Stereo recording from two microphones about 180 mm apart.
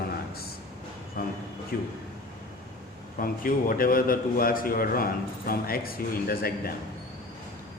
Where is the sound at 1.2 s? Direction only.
55° left (ahead or behind).